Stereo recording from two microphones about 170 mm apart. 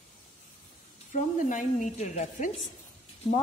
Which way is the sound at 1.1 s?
50° left (ahead or behind).